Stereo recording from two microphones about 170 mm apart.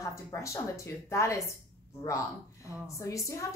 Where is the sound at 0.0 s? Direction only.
20° left (ahead or behind).